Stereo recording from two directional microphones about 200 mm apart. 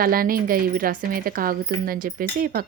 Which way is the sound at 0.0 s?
45° right (ahead or behind).